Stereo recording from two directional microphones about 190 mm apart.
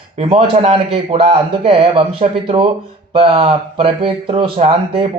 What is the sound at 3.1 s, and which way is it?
A man's voice, 30° right (ahead or behind).